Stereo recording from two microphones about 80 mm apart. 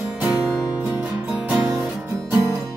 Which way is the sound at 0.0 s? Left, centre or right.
Centre.